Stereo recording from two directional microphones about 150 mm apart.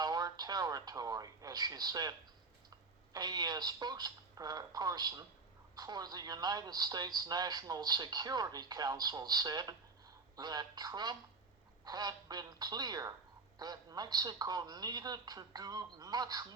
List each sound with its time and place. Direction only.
0.0 s speech: 25° right (ahead or behind)